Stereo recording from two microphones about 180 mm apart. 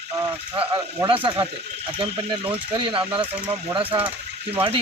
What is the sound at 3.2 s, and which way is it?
Speech, 10° right (ahead or behind).